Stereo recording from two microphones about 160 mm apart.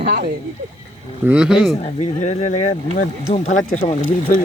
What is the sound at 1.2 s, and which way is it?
Speech, 5° right (ahead or behind).